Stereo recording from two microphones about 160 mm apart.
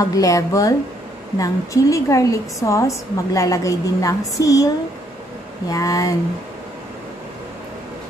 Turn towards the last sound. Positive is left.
turn(degrees=20)  # may be behind; listen again after turning